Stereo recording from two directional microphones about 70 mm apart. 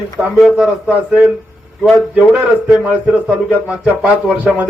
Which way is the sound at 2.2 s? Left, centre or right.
Centre.